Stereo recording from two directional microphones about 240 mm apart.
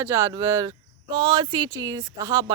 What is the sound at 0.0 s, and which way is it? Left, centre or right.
Speech, centre.